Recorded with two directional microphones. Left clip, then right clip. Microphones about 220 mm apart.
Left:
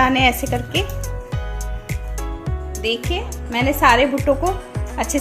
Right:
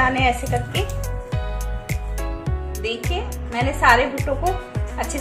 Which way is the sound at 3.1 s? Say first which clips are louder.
Left 3 dB; 45° left (ahead or behind).